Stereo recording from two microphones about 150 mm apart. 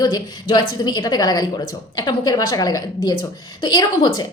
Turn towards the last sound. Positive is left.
turn(degrees=30)  # may be behind; listen again after turning